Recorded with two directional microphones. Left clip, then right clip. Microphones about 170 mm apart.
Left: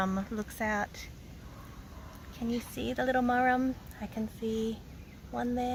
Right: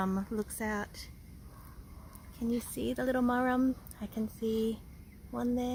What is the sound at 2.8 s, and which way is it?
Speech, 45° right (ahead or behind).